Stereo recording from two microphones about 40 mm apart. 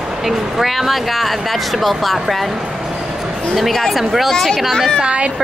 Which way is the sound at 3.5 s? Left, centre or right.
Centre.